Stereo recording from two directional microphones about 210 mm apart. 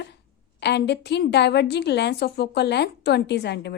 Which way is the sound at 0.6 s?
55° left (ahead or behind).